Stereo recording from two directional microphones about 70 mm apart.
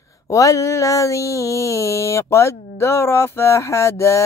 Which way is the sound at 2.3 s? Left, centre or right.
Left.